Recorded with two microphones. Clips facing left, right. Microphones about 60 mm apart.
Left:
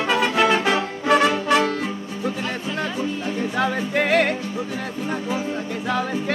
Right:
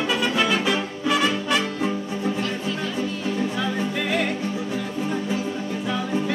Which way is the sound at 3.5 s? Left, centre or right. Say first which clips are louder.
Left 4 dB; left.